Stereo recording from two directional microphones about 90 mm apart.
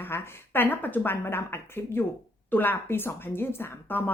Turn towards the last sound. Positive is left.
turn(degrees=25)  # may be behind; listen again after turning